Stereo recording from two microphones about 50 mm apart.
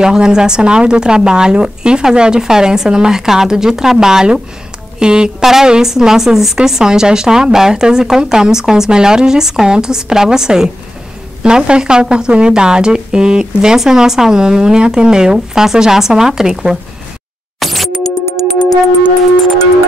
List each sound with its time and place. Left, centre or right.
0.0 s a woman's voice: centre
17.6 s music: centre
18.5 s music: left